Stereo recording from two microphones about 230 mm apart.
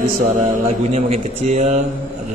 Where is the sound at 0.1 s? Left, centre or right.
Right.